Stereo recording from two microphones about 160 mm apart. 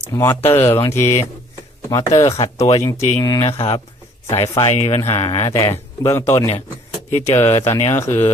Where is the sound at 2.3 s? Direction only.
40° left (ahead or behind).